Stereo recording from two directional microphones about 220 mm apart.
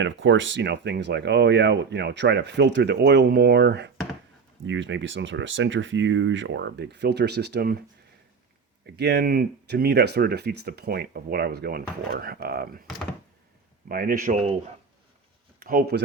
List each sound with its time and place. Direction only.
0.0 s speech: 60° right (ahead or behind)
9.0 s speech: 50° right (ahead or behind)
13.8 s a man's voice: 40° right (ahead or behind)
15.6 s speech: 45° right (ahead or behind)